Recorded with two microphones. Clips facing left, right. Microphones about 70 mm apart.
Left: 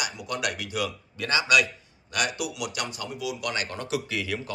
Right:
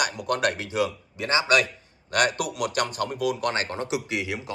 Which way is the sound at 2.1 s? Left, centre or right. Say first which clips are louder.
Right 5 dB; right.